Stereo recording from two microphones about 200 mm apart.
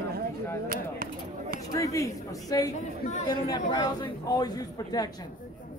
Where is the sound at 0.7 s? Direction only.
45° right (ahead or behind).